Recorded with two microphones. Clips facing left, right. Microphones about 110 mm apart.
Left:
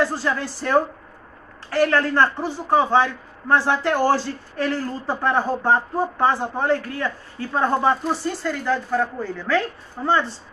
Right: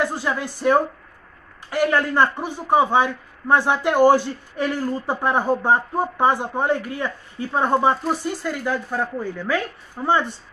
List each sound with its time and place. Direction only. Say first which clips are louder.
0.0 s a man's voice: left 1 dB; 15° right (ahead or behind)